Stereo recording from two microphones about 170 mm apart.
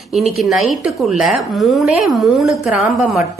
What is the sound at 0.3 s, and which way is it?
Speech, centre (ahead or behind).